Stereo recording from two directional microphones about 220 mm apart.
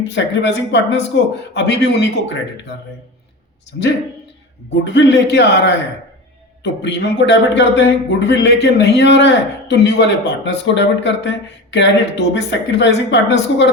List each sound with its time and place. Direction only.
0.0 s a man's voice: 55° left (ahead or behind)
4.7 s a man's voice: 50° left (ahead or behind)